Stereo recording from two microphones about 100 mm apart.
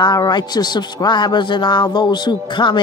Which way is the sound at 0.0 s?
45° left (ahead or behind).